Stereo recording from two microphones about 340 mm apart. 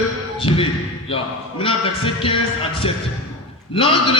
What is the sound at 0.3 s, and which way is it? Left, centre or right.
A man's voice, centre.